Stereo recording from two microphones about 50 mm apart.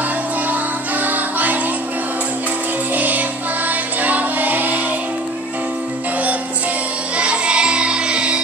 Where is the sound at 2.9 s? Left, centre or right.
Right.